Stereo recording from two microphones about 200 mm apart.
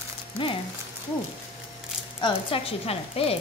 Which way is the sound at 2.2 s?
25° left (ahead or behind).